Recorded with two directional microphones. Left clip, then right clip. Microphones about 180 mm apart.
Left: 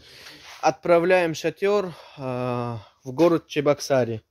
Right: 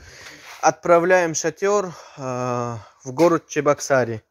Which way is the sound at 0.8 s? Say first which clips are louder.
Right 2 dB; centre (ahead or behind).